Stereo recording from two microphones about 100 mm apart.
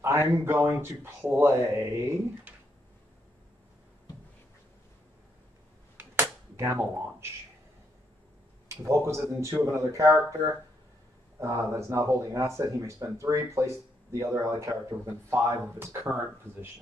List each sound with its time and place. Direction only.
0.0 s speech: 25° right (ahead or behind)
5.9 s cap gun: 25° right (ahead or behind)
8.6 s speech: 30° right (ahead or behind)
11.3 s speech: 25° right (ahead or behind)